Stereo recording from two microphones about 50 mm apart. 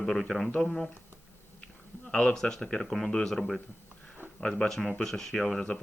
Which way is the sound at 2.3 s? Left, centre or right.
Centre.